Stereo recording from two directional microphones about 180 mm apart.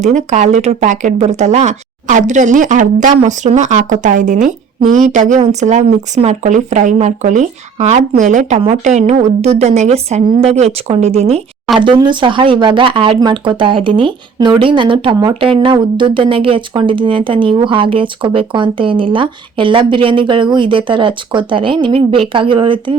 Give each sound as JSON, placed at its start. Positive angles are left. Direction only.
{"t": 0.0, "sound": "speech", "side_deg": -40}